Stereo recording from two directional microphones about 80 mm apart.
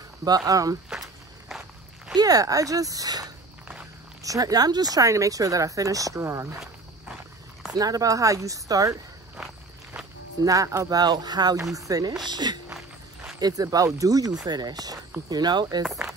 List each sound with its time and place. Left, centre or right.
0.5 s speech: right
0.8 s walk: centre
2.1 s speech: right
7.7 s speech: right
10.4 s speech: right
11.7 s speech: right
12.3 s speech: right